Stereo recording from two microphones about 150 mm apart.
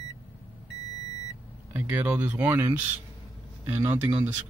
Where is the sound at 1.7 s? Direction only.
15° right (ahead or behind).